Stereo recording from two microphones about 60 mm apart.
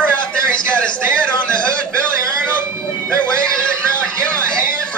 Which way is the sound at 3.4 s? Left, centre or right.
Centre.